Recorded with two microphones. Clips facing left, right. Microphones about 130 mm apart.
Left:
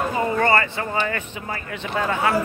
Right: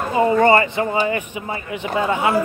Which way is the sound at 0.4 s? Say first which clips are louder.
Right 4 dB; 20° right (ahead or behind).